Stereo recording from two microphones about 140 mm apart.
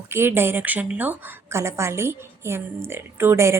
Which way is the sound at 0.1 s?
15° right (ahead or behind).